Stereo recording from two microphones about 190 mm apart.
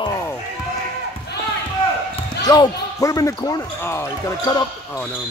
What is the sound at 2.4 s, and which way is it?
Speech, 20° left (ahead or behind).